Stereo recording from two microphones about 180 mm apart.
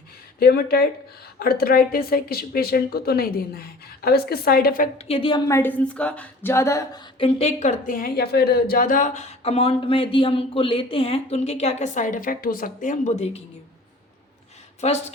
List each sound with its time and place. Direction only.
0.3 s speech: 60° left (ahead or behind)
4.9 s a woman's voice: 35° left (ahead or behind)
5.5 s a woman's voice: 15° left (ahead or behind)
7.2 s a woman's voice: 35° left (ahead or behind)
14.8 s a woman's voice: 40° left (ahead or behind)